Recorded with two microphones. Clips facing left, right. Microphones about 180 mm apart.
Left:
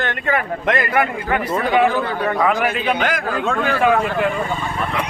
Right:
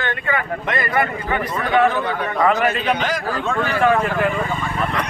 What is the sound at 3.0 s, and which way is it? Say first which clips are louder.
Speech: left 2 dB; 55° left (ahead or behind).